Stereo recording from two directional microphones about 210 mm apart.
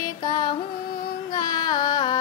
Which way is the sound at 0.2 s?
20° left (ahead or behind).